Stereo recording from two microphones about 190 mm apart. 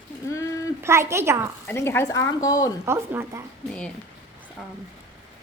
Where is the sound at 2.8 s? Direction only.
15° right (ahead or behind).